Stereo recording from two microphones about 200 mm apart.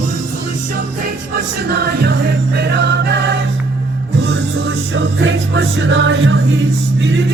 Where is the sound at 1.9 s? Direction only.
55° right (ahead or behind).